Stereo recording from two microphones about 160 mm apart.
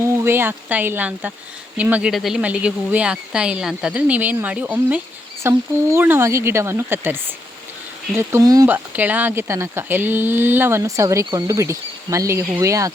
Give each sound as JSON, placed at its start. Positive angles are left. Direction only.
{"t": 0.0, "sound": "speech", "side_deg": -15}